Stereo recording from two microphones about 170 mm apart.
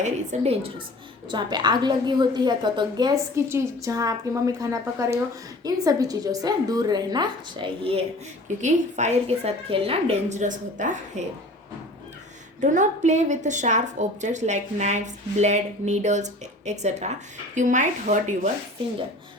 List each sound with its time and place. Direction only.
0.0 s a woman's voice: 40° right (ahead or behind)
1.3 s a woman's voice: 25° right (ahead or behind)
8.4 s a woman's voice: 45° right (ahead or behind)
12.5 s a woman's voice: 45° right (ahead or behind)